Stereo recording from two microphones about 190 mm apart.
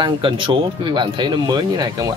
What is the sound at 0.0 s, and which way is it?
Speech, 25° right (ahead or behind).